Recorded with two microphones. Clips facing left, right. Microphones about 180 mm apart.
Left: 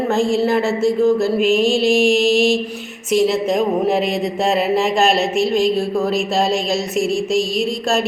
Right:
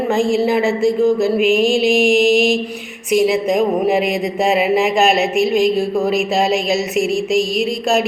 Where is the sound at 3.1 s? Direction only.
Centre (ahead or behind).